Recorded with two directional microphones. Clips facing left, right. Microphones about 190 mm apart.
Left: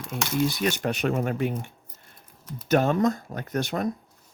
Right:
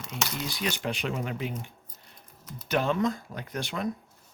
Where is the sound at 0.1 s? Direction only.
45° left (ahead or behind).